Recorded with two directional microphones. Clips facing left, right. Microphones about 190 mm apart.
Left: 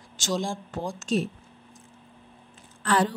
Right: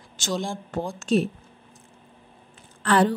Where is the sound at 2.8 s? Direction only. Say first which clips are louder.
Right 4 dB; 60° right (ahead or behind).